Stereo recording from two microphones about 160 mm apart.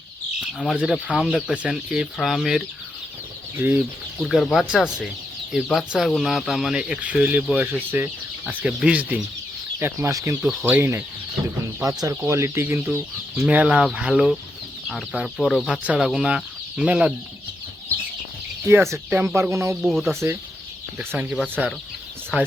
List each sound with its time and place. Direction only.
0.6 s speech: centre (ahead or behind)
3.6 s speech: 15° right (ahead or behind)
4.2 s speech: centre (ahead or behind); by 10.3 s 20° right (ahead or behind)
10.4 s speech: centre (ahead or behind)
10.7 s speech: 15° right (ahead or behind)
12.0 s speech: 15° right (ahead or behind)
18.9 s speech: 15° right (ahead or behind)
19.8 s speech: centre (ahead or behind)
20.1 s speech: 15° right (ahead or behind)